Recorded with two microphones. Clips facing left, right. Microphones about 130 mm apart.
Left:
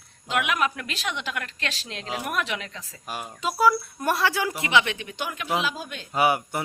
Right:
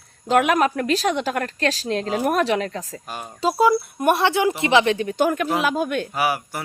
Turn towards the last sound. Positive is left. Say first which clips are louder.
# left 1 dB
turn(degrees=20)  # may be behind; listen again after turning